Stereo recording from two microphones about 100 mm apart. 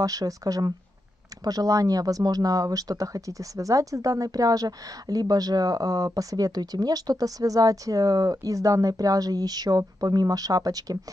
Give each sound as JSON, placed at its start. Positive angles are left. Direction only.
{"t": 0.0, "sound": "speech", "side_deg": -35}